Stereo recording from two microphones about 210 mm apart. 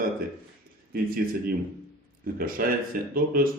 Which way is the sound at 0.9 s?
45° right (ahead or behind).